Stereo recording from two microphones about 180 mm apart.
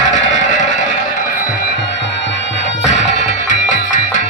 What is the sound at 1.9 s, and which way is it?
Music, 85° left.